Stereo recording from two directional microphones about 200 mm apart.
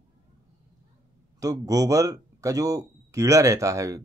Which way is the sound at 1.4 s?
15° right (ahead or behind).